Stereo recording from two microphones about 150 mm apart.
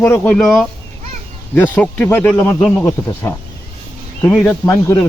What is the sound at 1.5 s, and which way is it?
Speech, 10° left (ahead or behind).